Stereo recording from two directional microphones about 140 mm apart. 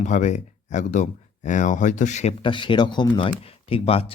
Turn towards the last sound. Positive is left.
turn(degrees=45)  # may be behind; listen again after turning